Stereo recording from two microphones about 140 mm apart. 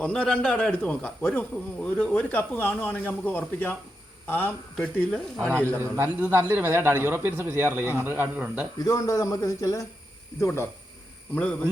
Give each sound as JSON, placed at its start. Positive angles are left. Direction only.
{"t": 0.0, "sound": "a man's voice", "side_deg": 5}
{"t": 5.8, "sound": "speech", "side_deg": -15}
{"t": 8.8, "sound": "a man's voice", "side_deg": 25}